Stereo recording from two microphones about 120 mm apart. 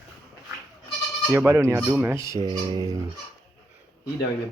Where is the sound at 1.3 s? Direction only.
20° right (ahead or behind).